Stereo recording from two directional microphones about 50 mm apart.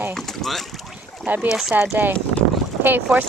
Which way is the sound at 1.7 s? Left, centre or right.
Right.